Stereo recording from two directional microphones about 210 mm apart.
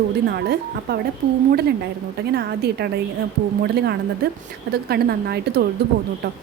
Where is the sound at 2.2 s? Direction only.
50° right (ahead or behind).